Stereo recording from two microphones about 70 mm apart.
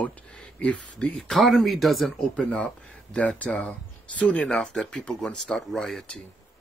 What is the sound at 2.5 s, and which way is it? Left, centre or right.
Speech, centre.